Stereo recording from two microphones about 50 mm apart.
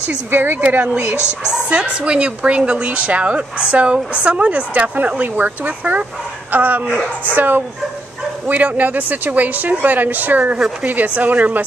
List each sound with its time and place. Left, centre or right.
0.3 s speech: right
1.7 s a woman's voice: right